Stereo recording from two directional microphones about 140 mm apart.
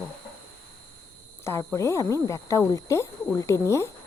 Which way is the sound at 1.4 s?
20° left (ahead or behind).